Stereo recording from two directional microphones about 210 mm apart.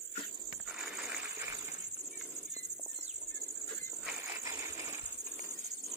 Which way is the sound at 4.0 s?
10° right (ahead or behind).